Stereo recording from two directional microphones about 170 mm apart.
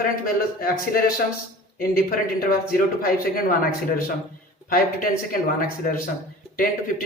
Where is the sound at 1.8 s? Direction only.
55° left (ahead or behind).